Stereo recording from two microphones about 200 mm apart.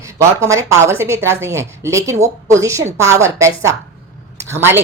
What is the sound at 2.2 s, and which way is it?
Speech, 35° right (ahead or behind).